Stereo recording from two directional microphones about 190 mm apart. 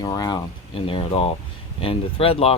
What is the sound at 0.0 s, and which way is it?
Speech, 20° left (ahead or behind).